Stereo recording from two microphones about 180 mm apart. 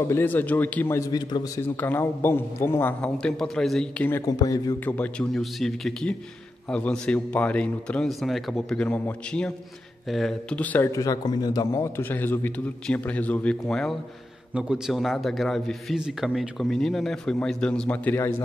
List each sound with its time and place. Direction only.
0.1 s a man's voice: 10° left (ahead or behind)
4.3 s a man's voice: 20° left (ahead or behind)
4.8 s a man's voice: 10° left (ahead or behind)